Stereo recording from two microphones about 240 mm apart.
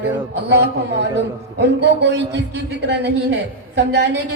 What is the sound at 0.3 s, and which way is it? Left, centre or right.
A man's voice, right.